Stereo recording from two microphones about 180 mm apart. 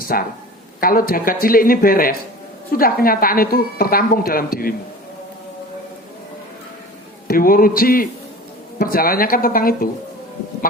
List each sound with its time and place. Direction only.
0.0 s speech: 55° left (ahead or behind)
7.3 s speech: 55° left (ahead or behind)